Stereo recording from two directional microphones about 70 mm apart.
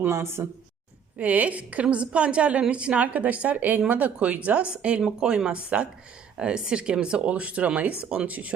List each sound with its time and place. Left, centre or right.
0.0 s speech: right
1.2 s a woman's voice: right